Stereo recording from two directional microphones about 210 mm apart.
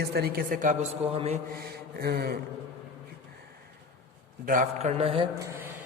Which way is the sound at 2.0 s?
50° right (ahead or behind).